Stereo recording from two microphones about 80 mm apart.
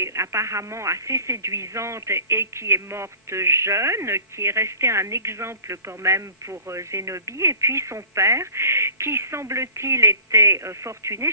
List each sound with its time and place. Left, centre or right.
0.0 s speech: right